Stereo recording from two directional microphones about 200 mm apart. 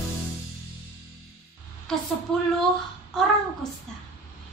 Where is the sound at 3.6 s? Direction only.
Centre (ahead or behind).